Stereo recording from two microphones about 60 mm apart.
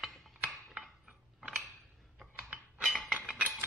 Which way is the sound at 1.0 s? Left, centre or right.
Centre.